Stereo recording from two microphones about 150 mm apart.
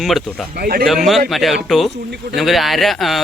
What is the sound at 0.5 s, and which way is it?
Speech, 90° right.